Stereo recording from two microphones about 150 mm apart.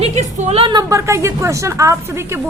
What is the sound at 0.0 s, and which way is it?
A woman's voice, 50° right (ahead or behind).